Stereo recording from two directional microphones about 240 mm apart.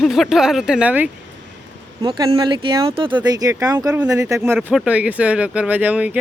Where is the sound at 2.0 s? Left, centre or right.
Right.